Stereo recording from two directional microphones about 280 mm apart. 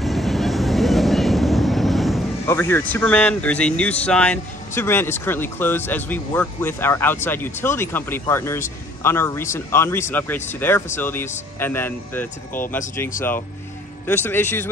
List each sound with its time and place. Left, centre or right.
0.0 s speech: centre
14.0 s speech: centre